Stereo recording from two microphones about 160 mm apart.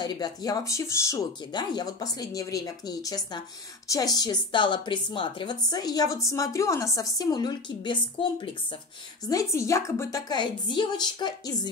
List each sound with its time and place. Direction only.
0.0 s speech: 25° left (ahead or behind)
9.3 s speech: 20° left (ahead or behind)